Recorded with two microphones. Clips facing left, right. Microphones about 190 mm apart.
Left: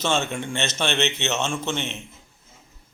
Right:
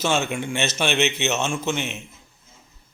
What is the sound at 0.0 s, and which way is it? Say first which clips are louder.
A man's voice: right 1 dB; 5° right (ahead or behind).